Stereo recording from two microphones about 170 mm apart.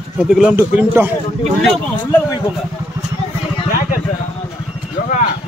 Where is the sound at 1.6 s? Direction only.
5° left (ahead or behind).